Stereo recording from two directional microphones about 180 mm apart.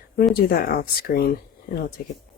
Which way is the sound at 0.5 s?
55° left (ahead or behind).